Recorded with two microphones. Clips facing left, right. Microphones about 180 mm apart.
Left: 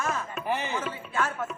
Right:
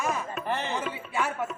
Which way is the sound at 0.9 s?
15° right (ahead or behind).